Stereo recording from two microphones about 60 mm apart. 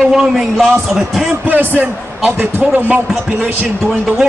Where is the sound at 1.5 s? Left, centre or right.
Right.